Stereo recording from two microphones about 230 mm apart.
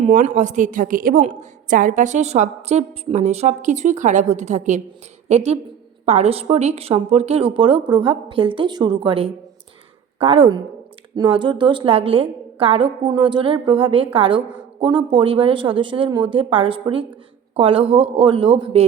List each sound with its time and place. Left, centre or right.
0.0 s a woman's voice: right